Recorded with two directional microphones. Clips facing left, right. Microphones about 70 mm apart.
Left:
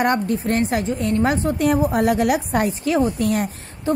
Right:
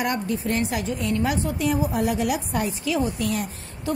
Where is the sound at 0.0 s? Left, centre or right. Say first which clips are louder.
Left 6 dB; left.